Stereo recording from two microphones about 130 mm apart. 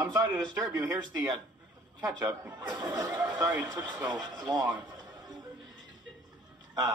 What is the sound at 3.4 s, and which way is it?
Speech, 30° right (ahead or behind).